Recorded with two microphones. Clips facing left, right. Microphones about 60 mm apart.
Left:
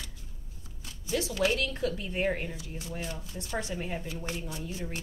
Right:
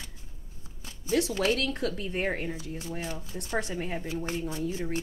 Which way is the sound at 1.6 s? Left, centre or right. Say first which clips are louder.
Right 1 dB; right.